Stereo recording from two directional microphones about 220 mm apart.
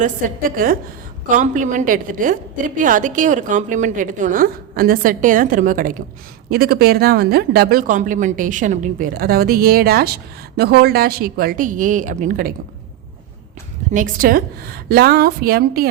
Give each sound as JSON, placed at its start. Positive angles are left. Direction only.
{"t": 0.0, "sound": "a woman's voice", "side_deg": -40}
{"t": 13.9, "sound": "speech", "side_deg": -40}